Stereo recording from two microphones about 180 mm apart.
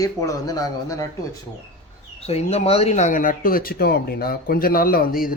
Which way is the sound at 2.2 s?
35° left (ahead or behind).